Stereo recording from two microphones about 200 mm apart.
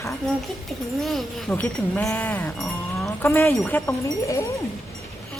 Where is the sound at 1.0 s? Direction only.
Centre (ahead or behind).